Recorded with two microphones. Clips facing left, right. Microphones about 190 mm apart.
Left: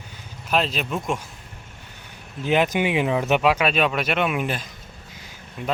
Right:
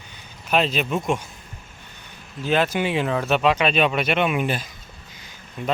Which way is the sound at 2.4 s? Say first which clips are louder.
Left 1 dB; 15° left (ahead or behind).